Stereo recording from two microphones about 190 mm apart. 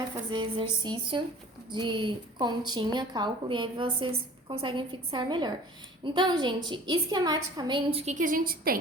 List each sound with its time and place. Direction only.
0.3 s a woman's voice: 25° right (ahead or behind); by 8.8 s 50° right (ahead or behind)